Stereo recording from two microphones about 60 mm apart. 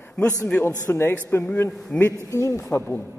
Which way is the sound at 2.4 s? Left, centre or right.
Left.